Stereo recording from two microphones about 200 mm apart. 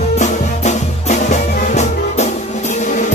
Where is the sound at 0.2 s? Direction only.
35° left (ahead or behind).